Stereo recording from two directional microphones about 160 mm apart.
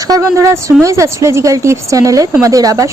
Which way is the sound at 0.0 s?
20° right (ahead or behind).